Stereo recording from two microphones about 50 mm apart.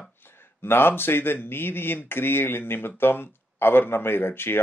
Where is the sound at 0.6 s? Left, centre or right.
Left.